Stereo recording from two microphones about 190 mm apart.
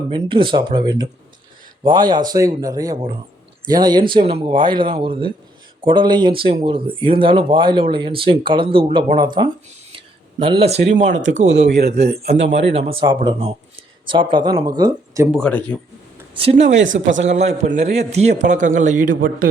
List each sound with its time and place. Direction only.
0.1 s a man's voice: 25° right (ahead or behind)
11.4 s speech: 65° right (ahead or behind)
12.7 s speech: 30° right (ahead or behind)
15.3 s speech: 5° left (ahead or behind)
16.3 s a man's voice: 30° right (ahead or behind)
16.7 s speech: 75° right (ahead or behind)
17.2 s a man's voice: 35° right (ahead or behind)